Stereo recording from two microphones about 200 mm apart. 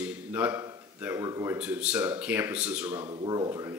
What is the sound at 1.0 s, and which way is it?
A man's voice, 15° right (ahead or behind).